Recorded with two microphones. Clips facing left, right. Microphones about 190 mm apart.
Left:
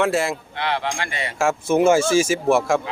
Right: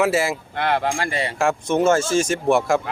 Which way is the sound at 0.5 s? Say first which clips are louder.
Right 3 dB; 50° right (ahead or behind).